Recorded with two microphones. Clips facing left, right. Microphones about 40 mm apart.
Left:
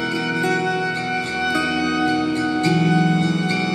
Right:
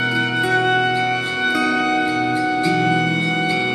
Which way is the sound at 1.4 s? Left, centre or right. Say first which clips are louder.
Right 3 dB; right.